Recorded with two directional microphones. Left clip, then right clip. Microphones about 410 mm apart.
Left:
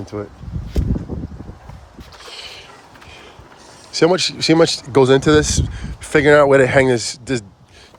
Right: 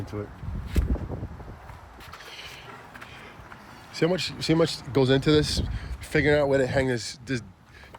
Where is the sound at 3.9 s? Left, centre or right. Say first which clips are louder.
Left 11 dB; centre.